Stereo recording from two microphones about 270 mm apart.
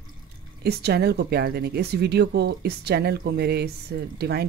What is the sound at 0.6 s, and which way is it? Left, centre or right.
Speech, right.